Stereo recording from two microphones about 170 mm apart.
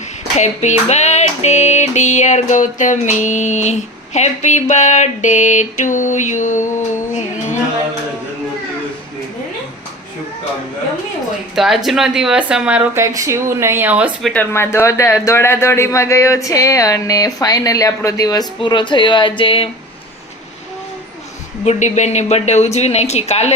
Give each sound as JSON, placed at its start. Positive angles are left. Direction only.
{"t": 0.3, "sound": "speech", "side_deg": 45}
{"t": 1.9, "sound": "a sound", "side_deg": 45}
{"t": 11.5, "sound": "speech", "side_deg": 0}
{"t": 14.5, "sound": "speech", "side_deg": 15}
{"t": 21.6, "sound": "speech", "side_deg": 40}